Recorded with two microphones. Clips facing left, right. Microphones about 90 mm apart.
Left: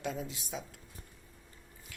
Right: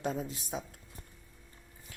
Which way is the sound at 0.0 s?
40° right (ahead or behind).